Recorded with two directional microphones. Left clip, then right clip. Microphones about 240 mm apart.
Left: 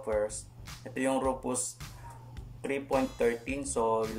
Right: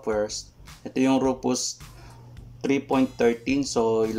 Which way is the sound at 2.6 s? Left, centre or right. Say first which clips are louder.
Right 7 dB; right.